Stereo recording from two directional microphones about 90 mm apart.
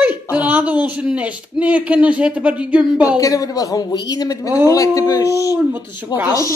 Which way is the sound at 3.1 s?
40° left (ahead or behind).